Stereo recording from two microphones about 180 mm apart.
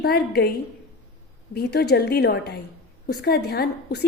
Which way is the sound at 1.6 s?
65° left (ahead or behind).